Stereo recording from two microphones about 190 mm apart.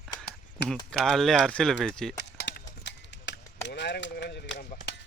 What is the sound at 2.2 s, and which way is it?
Clip-clop, 60° left (ahead or behind).